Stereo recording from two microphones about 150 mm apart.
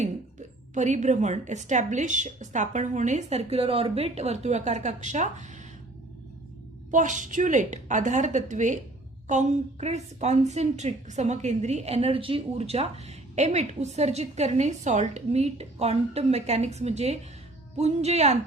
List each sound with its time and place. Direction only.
0.7 s a woman's voice: 55° right (ahead or behind)
6.9 s a woman's voice: 55° right (ahead or behind)